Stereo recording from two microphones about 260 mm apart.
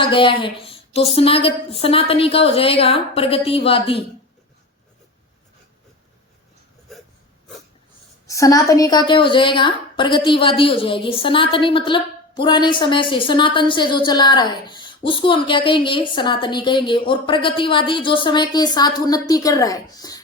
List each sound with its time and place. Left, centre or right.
0.0 s a woman's voice: centre
8.3 s a woman's voice: centre